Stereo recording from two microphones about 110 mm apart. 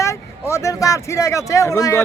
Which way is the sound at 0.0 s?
25° left (ahead or behind).